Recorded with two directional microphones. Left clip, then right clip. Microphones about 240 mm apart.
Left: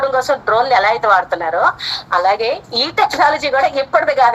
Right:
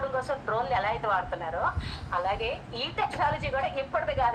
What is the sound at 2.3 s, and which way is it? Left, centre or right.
Speech, centre.